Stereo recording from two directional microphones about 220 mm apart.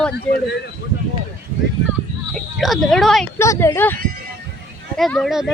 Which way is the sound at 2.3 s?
Centre (ahead or behind).